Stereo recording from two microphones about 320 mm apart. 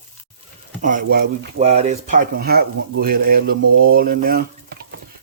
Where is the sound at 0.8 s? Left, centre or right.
Right.